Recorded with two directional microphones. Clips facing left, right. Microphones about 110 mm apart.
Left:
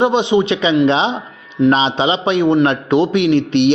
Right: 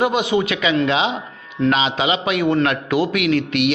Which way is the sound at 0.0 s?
25° left (ahead or behind).